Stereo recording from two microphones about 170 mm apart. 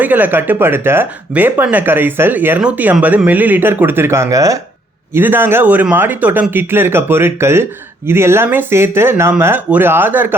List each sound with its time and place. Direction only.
0.0 s speech: 10° right (ahead or behind)